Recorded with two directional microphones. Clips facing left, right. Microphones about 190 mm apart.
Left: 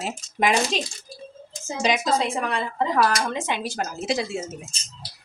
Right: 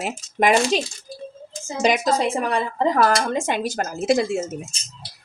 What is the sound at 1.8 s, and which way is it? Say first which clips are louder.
A woman's voice: right 3 dB; 50° right (ahead or behind).